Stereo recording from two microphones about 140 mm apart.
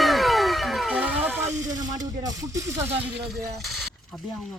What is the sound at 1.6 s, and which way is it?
Speech, 25° right (ahead or behind).